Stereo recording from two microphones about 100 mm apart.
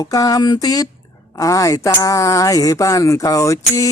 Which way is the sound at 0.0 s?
35° left (ahead or behind).